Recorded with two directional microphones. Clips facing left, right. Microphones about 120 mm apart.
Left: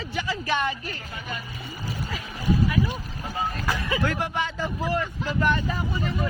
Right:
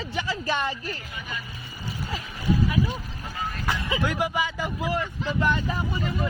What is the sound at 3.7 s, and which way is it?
Vehicle, 20° right (ahead or behind).